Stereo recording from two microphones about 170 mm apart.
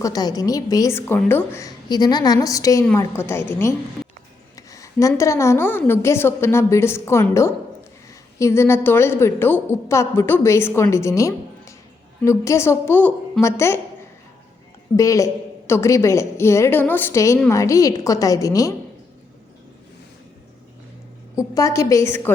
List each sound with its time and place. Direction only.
0.0 s a woman's voice: 20° left (ahead or behind)
14.9 s a woman's voice: 20° left (ahead or behind)
21.5 s a woman's voice: 20° left (ahead or behind)